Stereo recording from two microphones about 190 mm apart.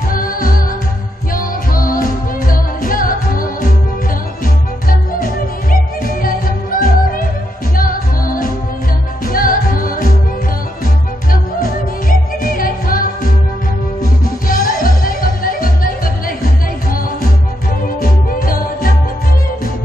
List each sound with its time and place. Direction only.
0.1 s music: 50° left (ahead or behind)
4.8 s music: 45° left (ahead or behind)
11.6 s music: 50° left (ahead or behind)